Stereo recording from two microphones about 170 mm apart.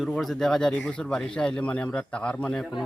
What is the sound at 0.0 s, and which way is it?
A man's voice, centre (ahead or behind).